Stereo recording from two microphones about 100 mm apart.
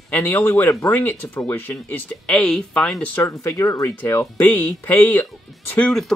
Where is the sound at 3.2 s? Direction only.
30° left (ahead or behind).